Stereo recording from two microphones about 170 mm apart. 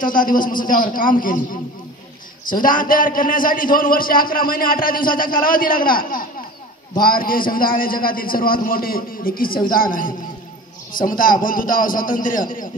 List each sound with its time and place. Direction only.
0.0 s a man's voice: 55° left (ahead or behind)
2.4 s a man's voice: 55° left (ahead or behind)
10.9 s chopping: 55° left (ahead or behind)